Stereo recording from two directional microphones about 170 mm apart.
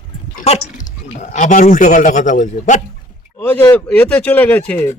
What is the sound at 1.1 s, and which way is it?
A man's voice, 45° left (ahead or behind).